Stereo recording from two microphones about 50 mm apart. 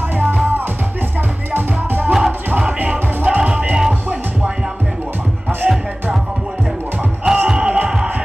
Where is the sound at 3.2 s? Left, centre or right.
Right.